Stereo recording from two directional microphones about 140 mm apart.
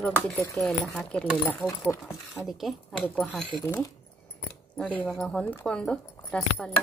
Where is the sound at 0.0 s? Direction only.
10° left (ahead or behind).